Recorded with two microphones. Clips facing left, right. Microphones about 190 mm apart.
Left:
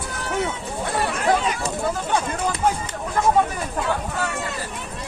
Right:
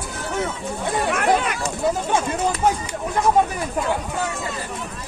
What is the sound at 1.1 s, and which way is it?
Speech, 60° right (ahead or behind).